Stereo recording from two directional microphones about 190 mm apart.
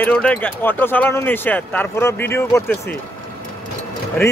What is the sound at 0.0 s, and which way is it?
Speech, 5° left (ahead or behind).